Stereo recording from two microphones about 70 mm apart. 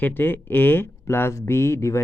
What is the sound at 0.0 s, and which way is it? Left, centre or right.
Speech, left.